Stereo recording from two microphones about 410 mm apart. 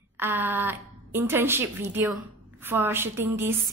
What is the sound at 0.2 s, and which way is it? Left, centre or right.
A woman's voice, centre.